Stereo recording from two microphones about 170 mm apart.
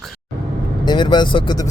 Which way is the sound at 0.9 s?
25° left (ahead or behind).